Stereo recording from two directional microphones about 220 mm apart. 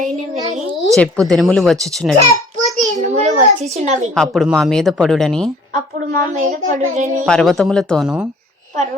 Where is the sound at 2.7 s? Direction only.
35° right (ahead or behind).